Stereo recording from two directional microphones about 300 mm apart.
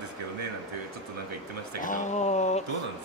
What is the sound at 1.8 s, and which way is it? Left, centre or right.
Speech, left.